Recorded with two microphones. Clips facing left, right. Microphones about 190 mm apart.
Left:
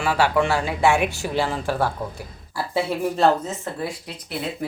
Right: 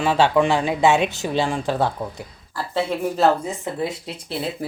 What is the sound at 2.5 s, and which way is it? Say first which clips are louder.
Speech: even; 10° left (ahead or behind).